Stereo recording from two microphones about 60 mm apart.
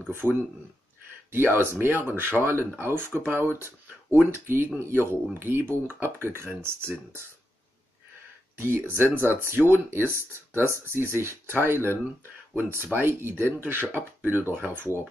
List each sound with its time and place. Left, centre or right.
0.1 s speech: right
8.5 s speech: right